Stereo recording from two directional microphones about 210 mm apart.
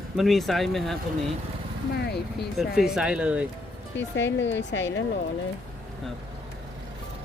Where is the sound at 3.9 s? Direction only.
60° left (ahead or behind).